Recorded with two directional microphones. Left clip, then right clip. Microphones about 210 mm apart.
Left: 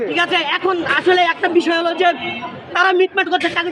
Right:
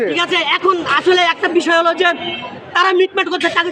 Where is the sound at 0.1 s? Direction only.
5° right (ahead or behind).